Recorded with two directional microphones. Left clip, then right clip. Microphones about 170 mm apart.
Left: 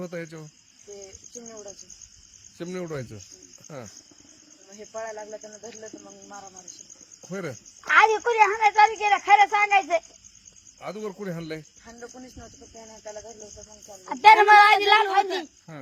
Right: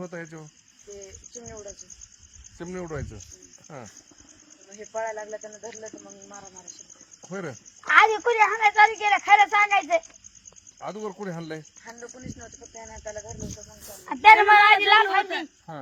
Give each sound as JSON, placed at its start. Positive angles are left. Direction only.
{"t": 0.0, "sound": "speech", "side_deg": 40}
{"t": 1.5, "sound": "speech", "side_deg": -5}
{"t": 2.6, "sound": "speech", "side_deg": 45}
{"t": 4.7, "sound": "speech", "side_deg": -5}
{"t": 7.3, "sound": "speech", "side_deg": 35}
{"t": 11.9, "sound": "speech", "side_deg": 0}
{"t": 14.0, "sound": "speech", "side_deg": 30}